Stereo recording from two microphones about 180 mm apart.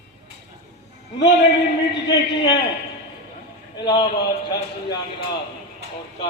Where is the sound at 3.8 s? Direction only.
25° left (ahead or behind).